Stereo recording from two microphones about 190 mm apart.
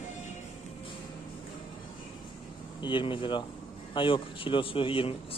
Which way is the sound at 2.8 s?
25° left (ahead or behind).